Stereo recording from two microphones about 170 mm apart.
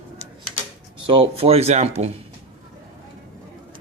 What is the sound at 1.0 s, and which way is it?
A man's voice, 30° right (ahead or behind).